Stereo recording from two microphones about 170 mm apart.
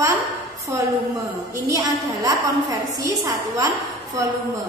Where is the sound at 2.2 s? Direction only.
20° right (ahead or behind).